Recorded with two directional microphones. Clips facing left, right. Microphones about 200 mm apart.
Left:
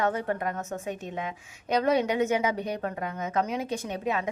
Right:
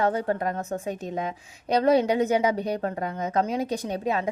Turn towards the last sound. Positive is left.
turn(degrees=-35)  # may be behind; listen again after turning